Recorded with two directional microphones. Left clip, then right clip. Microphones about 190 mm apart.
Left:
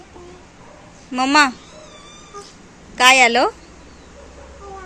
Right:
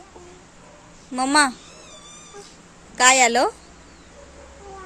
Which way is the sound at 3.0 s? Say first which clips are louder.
Left 4 dB; 15° right (ahead or behind).